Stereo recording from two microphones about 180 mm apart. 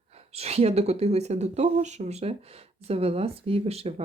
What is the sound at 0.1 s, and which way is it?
Speech, 35° right (ahead or behind).